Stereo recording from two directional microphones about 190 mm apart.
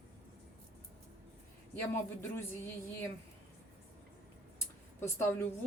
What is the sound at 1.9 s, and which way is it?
Speech, 15° left (ahead or behind).